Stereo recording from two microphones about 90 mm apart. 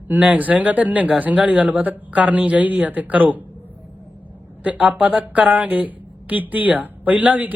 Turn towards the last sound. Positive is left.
turn(degrees=-15)  # may be behind; listen again after turning